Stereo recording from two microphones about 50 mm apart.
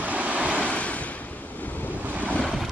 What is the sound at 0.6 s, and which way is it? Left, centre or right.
Waves, left.